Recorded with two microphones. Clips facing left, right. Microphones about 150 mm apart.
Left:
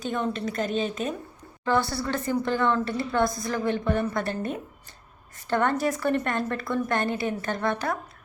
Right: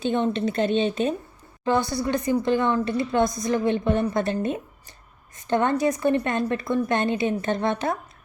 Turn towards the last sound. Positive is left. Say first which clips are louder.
# right 3 dB
turn(degrees=-20)  # may be behind; listen again after turning